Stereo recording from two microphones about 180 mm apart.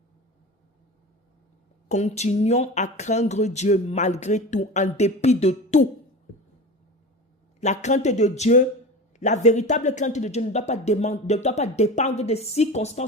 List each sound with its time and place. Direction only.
1.9 s speech: 40° left (ahead or behind)
7.6 s speech: 40° left (ahead or behind)